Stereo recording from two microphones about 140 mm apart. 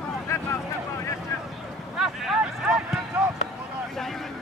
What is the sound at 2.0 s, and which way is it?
Speech, 5° right (ahead or behind).